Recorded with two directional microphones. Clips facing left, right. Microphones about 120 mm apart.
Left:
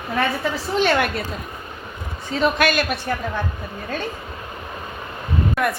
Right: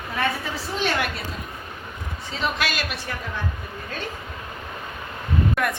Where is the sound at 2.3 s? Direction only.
50° left (ahead or behind).